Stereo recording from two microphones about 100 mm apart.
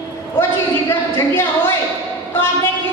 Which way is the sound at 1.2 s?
20° left (ahead or behind).